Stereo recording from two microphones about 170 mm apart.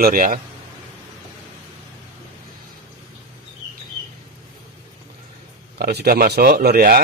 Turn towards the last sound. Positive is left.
turn(degrees=-60)  # may be behind; listen again after turning